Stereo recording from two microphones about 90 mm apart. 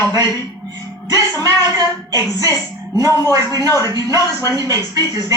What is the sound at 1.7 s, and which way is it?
A man's voice, 40° right (ahead or behind).